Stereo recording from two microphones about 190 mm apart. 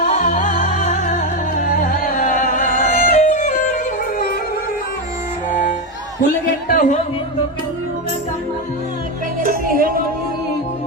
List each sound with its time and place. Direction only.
0.0 s music: 35° left (ahead or behind)
5.5 s music: 40° left (ahead or behind)
9.4 s music: 50° right (ahead or behind)